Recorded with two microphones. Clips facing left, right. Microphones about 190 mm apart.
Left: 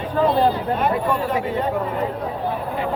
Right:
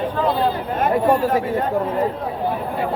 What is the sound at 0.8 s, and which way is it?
Speech, 45° right (ahead or behind).